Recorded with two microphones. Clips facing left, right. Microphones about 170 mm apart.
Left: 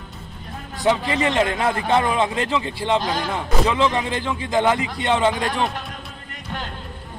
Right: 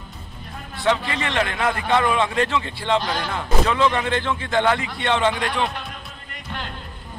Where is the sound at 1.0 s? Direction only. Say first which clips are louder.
Left 4 dB; 20° left (ahead or behind).